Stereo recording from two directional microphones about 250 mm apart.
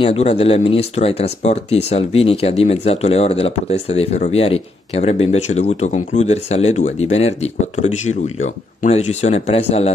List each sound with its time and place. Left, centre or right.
0.0 s speech: left